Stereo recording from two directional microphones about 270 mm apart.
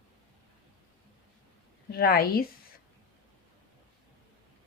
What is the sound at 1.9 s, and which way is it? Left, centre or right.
Speech, left.